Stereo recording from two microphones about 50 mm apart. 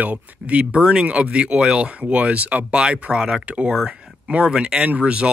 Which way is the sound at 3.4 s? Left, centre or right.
Right.